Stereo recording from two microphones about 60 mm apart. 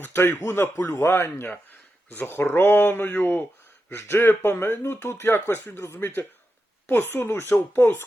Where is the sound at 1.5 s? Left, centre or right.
Left.